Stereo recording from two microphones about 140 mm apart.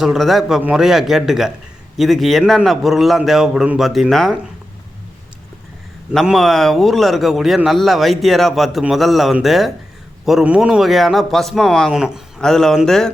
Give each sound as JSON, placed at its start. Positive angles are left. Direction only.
{"t": 0.0, "sound": "a man's voice", "side_deg": 0}
{"t": 6.1, "sound": "a man's voice", "side_deg": -5}